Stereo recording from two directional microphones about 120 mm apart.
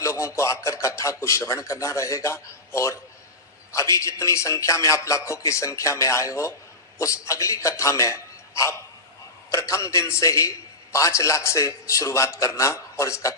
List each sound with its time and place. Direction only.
0.0 s a man's voice: 25° left (ahead or behind)